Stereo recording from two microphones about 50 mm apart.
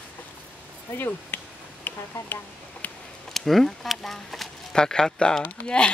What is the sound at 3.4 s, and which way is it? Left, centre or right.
Speech, centre.